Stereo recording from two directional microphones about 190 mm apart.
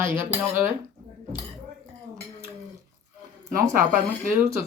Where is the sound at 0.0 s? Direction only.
10° right (ahead or behind).